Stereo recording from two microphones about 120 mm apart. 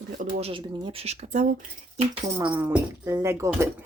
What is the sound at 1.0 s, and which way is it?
Speech, 65° right (ahead or behind).